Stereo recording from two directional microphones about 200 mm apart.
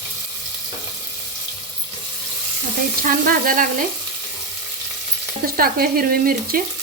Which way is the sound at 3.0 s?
45° right (ahead or behind).